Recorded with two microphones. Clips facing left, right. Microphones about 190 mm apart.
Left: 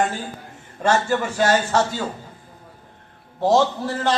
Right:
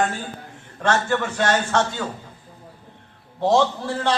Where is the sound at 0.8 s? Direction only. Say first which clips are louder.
Left 2 dB; 10° left (ahead or behind).